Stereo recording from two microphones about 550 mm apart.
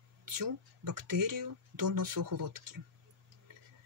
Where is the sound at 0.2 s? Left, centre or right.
Right.